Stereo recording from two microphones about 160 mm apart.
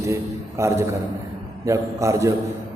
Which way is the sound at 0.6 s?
15° right (ahead or behind).